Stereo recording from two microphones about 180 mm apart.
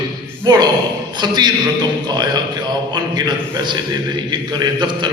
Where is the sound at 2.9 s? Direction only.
20° right (ahead or behind).